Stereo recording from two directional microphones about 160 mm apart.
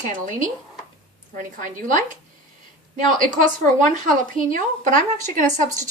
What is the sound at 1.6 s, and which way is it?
Speech, 55° right (ahead or behind).